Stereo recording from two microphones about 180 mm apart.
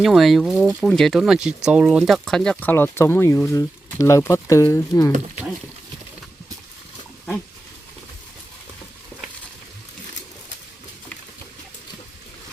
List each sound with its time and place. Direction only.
0.0 s speech: centre (ahead or behind); by 5.1 s 20° left (ahead or behind)